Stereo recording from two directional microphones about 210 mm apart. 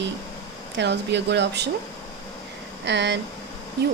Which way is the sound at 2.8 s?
55° right (ahead or behind).